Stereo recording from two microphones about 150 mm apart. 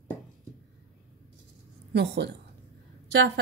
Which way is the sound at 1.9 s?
90° right.